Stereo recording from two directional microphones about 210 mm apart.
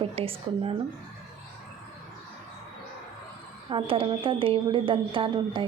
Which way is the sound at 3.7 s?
25° right (ahead or behind).